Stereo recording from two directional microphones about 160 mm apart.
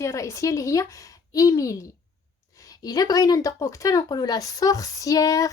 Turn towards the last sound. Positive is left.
turn(degrees=20)  # may be behind; listen again after turning